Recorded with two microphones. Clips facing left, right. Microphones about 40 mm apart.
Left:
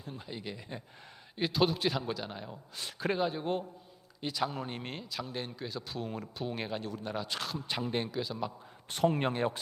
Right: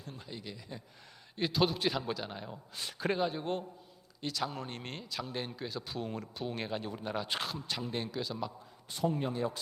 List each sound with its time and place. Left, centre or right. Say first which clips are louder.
0.0 s speech: left 3 dB; centre
1.4 s speech: left 1 dB; centre
7.7 s speech: left 6 dB; left
8.1 s speech: left 2 dB; centre
8.9 s speech: left 4 dB; left